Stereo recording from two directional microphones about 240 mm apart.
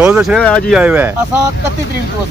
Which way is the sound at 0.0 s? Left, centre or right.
Centre.